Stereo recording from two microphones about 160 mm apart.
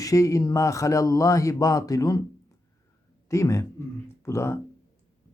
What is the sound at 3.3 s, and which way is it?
Speech, 20° left (ahead or behind).